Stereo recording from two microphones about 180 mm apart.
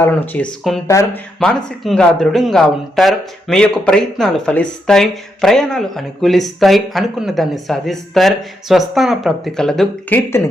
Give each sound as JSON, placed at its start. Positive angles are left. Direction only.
{"t": 0.0, "sound": "speech", "side_deg": 5}
{"t": 0.9, "sound": "speech", "side_deg": 15}
{"t": 1.4, "sound": "speech", "side_deg": 0}